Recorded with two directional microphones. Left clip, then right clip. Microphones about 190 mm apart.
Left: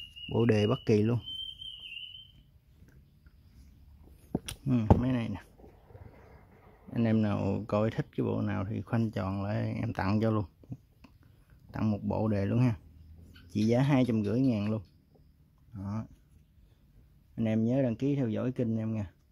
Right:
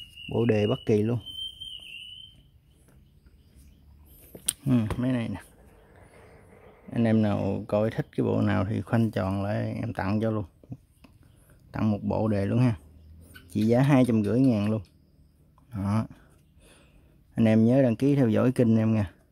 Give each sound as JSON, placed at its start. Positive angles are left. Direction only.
{"t": 0.3, "sound": "speech", "side_deg": 0}
{"t": 4.5, "sound": "a sound", "side_deg": -5}
{"t": 6.9, "sound": "speech", "side_deg": -5}
{"t": 15.7, "sound": "speech", "side_deg": -25}
{"t": 17.4, "sound": "speech", "side_deg": -20}